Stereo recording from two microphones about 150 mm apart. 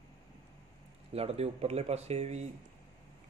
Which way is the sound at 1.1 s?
45° right (ahead or behind).